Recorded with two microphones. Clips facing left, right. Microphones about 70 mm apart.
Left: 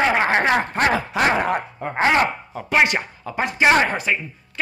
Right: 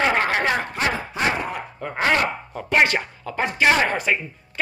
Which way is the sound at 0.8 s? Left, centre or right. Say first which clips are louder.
Left 5 dB; left.